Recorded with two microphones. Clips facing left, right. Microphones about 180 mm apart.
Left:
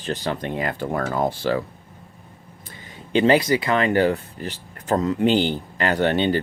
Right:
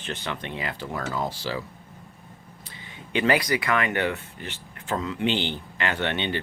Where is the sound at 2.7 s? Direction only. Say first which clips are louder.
Left 4 dB; 45° left (ahead or behind).